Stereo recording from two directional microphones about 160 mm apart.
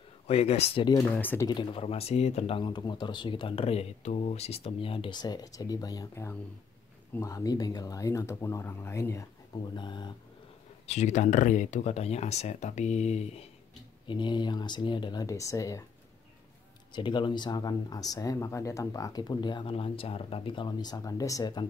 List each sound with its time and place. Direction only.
0.3 s speech: 40° left (ahead or behind)
1.0 s speech: 10° left (ahead or behind)
1.5 s speech: 35° left (ahead or behind); by 9.2 s 15° left (ahead or behind)
9.8 s speech: 30° left (ahead or behind)
10.9 s speech: 45° left (ahead or behind)
14.0 s speech: 30° left (ahead or behind)
16.9 s speech: 30° left (ahead or behind)